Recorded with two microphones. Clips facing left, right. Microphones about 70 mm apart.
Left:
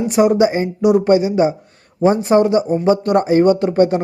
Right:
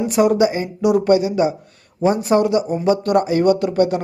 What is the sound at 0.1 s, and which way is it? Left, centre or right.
Speech, left.